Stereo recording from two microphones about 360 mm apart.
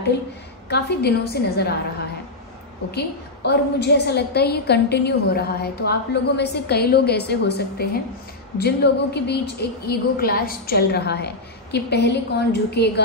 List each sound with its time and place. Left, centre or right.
0.7 s a woman's voice: left
2.9 s a woman's voice: left